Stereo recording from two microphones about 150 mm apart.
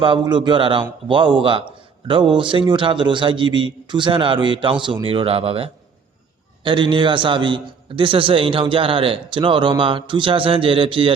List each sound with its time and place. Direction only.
0.0 s a man's voice: 35° right (ahead or behind)